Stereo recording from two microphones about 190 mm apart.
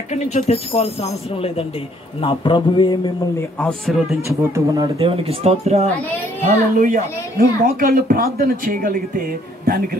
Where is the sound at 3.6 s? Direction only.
Centre (ahead or behind).